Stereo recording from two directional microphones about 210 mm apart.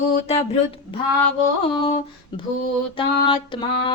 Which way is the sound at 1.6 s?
25° left (ahead or behind).